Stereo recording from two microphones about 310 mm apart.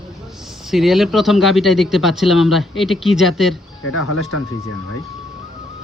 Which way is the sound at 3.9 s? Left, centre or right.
Left.